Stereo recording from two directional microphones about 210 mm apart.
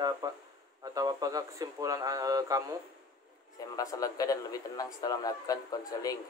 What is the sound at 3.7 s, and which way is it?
Speech, 15° left (ahead or behind).